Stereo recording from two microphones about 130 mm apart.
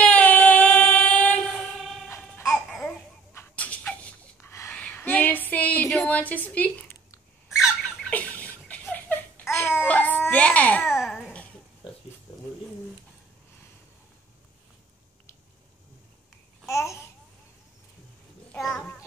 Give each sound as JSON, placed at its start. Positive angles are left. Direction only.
{"t": 0.0, "sound": "child singing", "side_deg": 10}
{"t": 2.0, "sound": "music", "side_deg": 15}
{"t": 2.5, "sound": "babbling", "side_deg": 5}
{"t": 3.3, "sound": "a sound", "side_deg": 10}
{"t": 7.4, "sound": "squawk", "side_deg": 0}
{"t": 7.8, "sound": "a sound", "side_deg": 10}
{"t": 10.9, "sound": "babbling", "side_deg": -5}
{"t": 11.8, "sound": "pig", "side_deg": 45}
{"t": 16.6, "sound": "babbling", "side_deg": 20}
{"t": 18.5, "sound": "a sound", "side_deg": 5}